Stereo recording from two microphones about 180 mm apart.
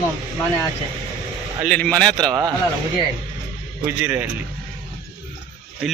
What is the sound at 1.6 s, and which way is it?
Speech, 5° left (ahead or behind).